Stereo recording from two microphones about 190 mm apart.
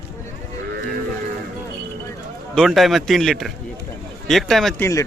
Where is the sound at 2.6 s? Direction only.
Centre (ahead or behind).